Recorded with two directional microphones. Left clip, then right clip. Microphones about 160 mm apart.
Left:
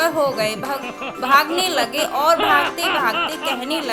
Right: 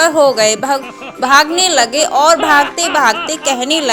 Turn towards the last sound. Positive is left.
turn(degrees=-35)  # may be behind; listen again after turning